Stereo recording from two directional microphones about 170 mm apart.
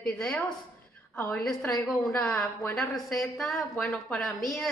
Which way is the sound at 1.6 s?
20° left (ahead or behind).